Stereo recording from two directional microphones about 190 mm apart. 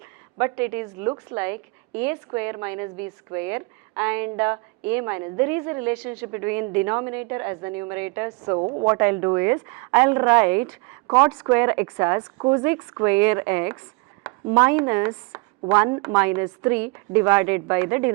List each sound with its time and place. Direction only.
0.3 s a woman's voice: 10° right (ahead or behind)
8.5 s a woman's voice: 25° right (ahead or behind)
8.9 s a woman's voice: 10° right (ahead or behind)